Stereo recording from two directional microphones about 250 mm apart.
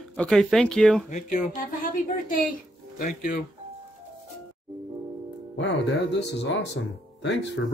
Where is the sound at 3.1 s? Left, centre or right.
Left.